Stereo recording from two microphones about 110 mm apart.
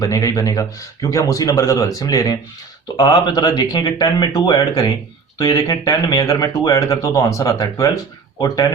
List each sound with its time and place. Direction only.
0.0 s speech: 30° left (ahead or behind)